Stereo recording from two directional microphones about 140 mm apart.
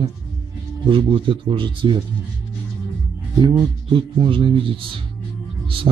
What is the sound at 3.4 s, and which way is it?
Speech, 35° right (ahead or behind).